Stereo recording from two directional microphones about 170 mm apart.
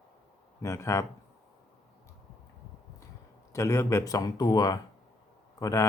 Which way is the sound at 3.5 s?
15° left (ahead or behind).